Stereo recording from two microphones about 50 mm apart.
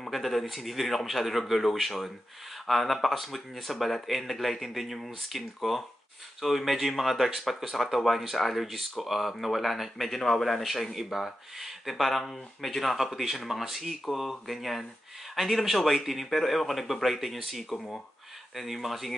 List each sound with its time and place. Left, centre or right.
0.0 s speech: centre
17.7 s speech: centre
18.6 s speech: centre